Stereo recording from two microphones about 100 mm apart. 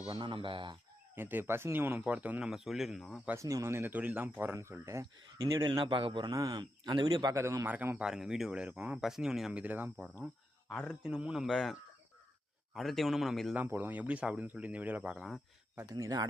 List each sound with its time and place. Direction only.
0.0 s speech: 55° right (ahead or behind)
1.1 s speech: 20° right (ahead or behind)
2.5 s speech: 5° right (ahead or behind)
3.3 s speech: 30° right (ahead or behind)
5.6 s a man's voice: 50° right (ahead or behind)
6.3 s a man's voice: 40° right (ahead or behind)
7.4 s speech: 25° right (ahead or behind)
7.7 s speech: 15° right (ahead or behind)
8.0 s speech: 5° right (ahead or behind)
9.5 s speech: 15° right (ahead or behind)
10.8 s speech: 5° right (ahead or behind)
11.4 s speech: 5° left (ahead or behind)
13.7 s speech: 20° right (ahead or behind)
15.9 s a man's voice: 40° right (ahead or behind)